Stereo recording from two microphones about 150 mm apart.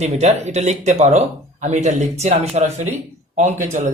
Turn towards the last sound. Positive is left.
turn(degrees=-55)  # may be behind; listen again after turning